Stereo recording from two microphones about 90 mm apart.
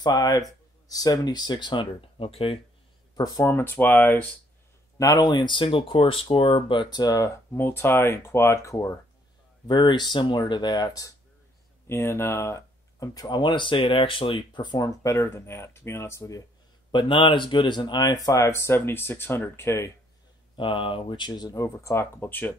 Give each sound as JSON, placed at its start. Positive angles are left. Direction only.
{"t": 0.0, "sound": "speech", "side_deg": 45}
{"t": 3.3, "sound": "speech", "side_deg": 25}
{"t": 4.9, "sound": "speech", "side_deg": 40}
{"t": 9.7, "sound": "speech", "side_deg": 60}
{"t": 11.9, "sound": "speech", "side_deg": 30}
{"t": 14.9, "sound": "speech", "side_deg": 35}
{"t": 16.9, "sound": "speech", "side_deg": 65}
{"t": 20.5, "sound": "speech", "side_deg": 70}
{"t": 21.3, "sound": "speech", "side_deg": 45}
{"t": 21.7, "sound": "speech", "side_deg": 30}